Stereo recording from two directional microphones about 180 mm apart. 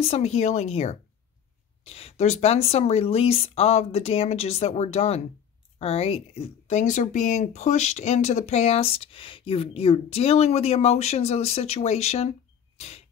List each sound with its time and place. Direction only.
0.0 s speech: 35° left (ahead or behind)